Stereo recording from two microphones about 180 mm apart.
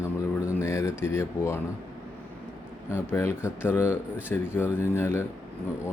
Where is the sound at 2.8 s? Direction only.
15° left (ahead or behind).